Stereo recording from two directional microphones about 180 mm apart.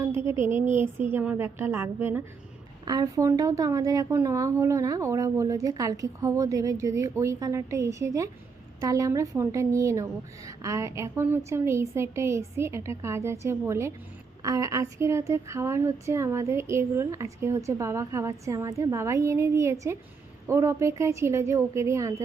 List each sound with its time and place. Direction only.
0.0 s speech: 15° right (ahead or behind)